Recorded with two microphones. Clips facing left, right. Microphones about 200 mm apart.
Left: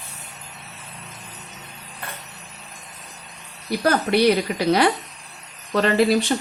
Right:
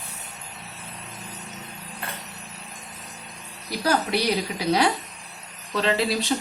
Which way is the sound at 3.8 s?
60° left (ahead or behind).